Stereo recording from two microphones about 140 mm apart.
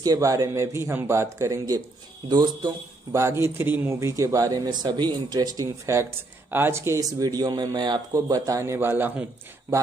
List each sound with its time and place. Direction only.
0.0 s a man's voice: 25° right (ahead or behind)